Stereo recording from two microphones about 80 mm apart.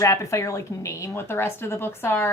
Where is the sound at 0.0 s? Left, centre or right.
Left.